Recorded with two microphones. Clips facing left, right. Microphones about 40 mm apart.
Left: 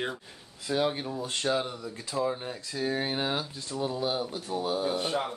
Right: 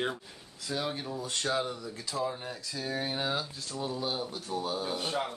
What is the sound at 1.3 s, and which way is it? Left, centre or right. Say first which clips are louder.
Speech: left 2 dB; left.